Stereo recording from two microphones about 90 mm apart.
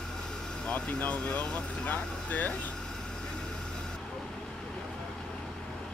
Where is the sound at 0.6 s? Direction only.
15° left (ahead or behind).